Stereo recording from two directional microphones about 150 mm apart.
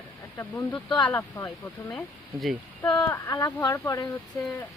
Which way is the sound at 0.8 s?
30° left (ahead or behind).